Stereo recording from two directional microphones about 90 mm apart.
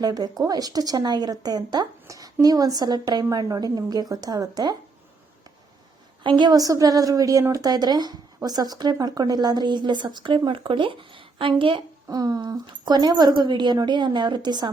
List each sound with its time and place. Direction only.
0.0 s speech: 45° right (ahead or behind)
6.2 s a woman's voice: 55° right (ahead or behind); by 11.8 s 75° right (ahead or behind)
12.0 s a woman's voice: 45° right (ahead or behind)